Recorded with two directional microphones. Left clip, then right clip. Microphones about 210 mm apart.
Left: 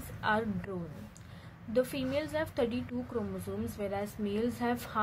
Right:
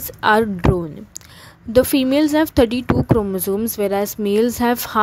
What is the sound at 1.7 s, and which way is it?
A woman's voice, 55° right (ahead or behind).